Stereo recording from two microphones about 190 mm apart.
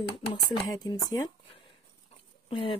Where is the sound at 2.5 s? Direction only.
25° left (ahead or behind).